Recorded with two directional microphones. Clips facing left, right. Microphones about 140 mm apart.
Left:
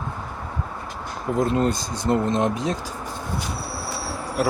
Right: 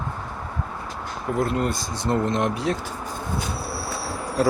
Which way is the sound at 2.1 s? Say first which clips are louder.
Left 2 dB; 20° left (ahead or behind).